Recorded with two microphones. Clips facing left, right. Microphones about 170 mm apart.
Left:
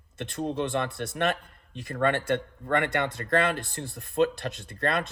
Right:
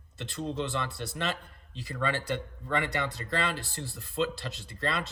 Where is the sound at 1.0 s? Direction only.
55° left (ahead or behind).